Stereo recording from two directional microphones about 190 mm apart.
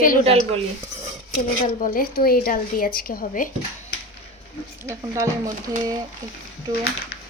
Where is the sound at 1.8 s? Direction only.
45° left (ahead or behind).